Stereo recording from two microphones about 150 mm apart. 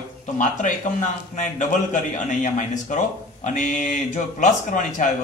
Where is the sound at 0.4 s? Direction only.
55° left (ahead or behind).